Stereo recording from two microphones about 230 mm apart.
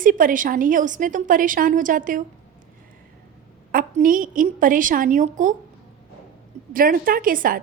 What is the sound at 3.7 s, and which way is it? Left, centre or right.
A woman's voice, right.